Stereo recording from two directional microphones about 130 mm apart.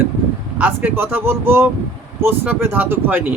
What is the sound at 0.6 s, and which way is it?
Speech, 15° right (ahead or behind).